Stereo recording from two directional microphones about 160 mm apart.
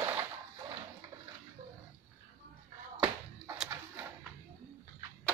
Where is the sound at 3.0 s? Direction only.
5° right (ahead or behind).